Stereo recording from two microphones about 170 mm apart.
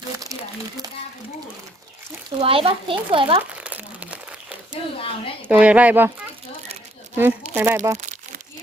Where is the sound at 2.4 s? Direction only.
35° right (ahead or behind).